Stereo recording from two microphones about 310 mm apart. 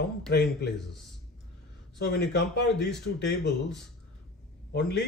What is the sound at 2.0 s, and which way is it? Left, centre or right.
Speech, left.